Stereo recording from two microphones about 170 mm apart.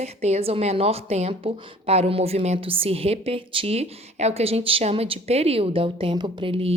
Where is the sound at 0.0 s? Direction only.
40° right (ahead or behind).